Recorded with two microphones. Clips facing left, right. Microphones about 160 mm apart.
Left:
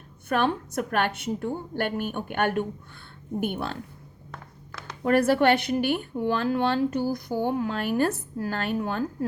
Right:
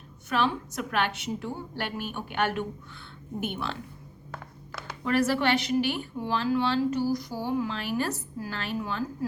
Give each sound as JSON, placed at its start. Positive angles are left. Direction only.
{"t": 0.3, "sound": "a woman's voice", "side_deg": 55}
{"t": 4.3, "sound": "a sound", "side_deg": -5}
{"t": 5.0, "sound": "a woman's voice", "side_deg": 50}